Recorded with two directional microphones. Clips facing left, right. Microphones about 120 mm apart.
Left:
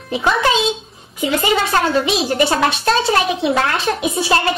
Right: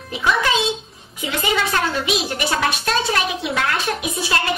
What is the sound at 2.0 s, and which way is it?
A woman's voice, 30° left (ahead or behind).